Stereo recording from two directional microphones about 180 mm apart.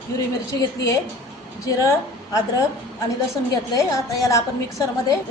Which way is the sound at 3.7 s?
20° left (ahead or behind).